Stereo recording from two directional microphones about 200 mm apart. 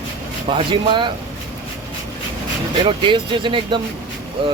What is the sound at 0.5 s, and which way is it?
Speech, 25° right (ahead or behind).